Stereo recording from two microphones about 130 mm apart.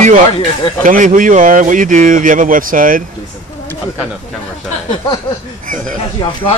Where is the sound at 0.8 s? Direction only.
85° right.